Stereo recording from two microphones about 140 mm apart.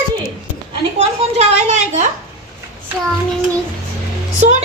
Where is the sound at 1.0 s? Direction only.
50° right (ahead or behind).